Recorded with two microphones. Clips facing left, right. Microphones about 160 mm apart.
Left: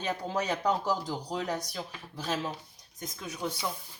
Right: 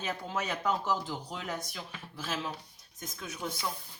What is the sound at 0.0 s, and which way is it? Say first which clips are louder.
Speech: left 3 dB; 35° left (ahead or behind).